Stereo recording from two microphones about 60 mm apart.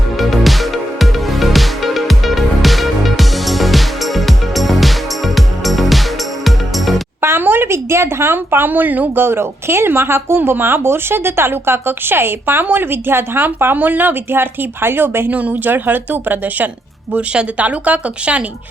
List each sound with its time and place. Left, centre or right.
0.2 s music: centre
7.2 s a sound: right
9.2 s speech: right
15.3 s a woman's voice: right
17.1 s a woman's voice: right